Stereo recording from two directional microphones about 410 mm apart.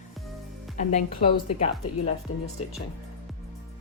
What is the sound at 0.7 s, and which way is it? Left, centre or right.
Speech, centre.